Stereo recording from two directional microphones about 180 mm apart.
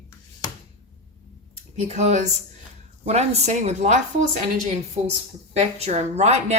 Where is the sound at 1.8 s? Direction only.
40° right (ahead or behind).